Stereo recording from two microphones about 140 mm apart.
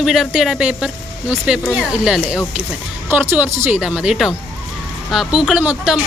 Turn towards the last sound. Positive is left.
turn(degrees=-5)  # may be behind; listen again after turning